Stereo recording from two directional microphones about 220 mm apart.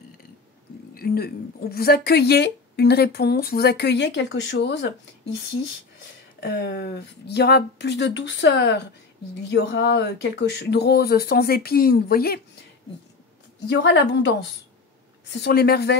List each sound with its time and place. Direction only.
0.9 s speech: 45° left (ahead or behind)
13.7 s speech: 50° left (ahead or behind)
15.3 s speech: 50° left (ahead or behind)